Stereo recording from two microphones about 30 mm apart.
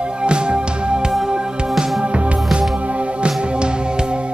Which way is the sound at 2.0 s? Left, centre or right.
Right.